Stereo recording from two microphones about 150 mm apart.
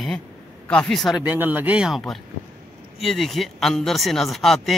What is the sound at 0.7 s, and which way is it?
Speech, 5° left (ahead or behind).